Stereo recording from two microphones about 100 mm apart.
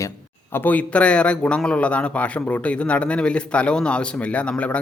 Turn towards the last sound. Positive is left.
turn(degrees=10)  # may be behind; listen again after turning